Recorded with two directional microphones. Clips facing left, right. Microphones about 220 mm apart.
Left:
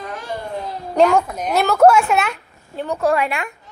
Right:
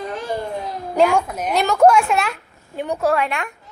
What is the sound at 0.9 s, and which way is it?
A woman's voice, 5° right (ahead or behind).